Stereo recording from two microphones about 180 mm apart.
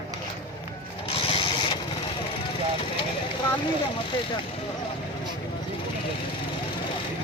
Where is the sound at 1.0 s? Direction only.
30° left (ahead or behind).